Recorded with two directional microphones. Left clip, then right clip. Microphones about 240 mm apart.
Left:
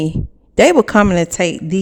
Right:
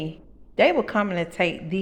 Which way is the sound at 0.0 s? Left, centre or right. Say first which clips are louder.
Left 13 dB; left.